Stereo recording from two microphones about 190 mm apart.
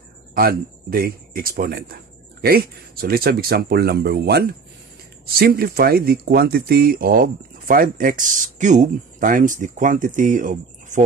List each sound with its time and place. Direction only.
0.3 s speech: 50° right (ahead or behind)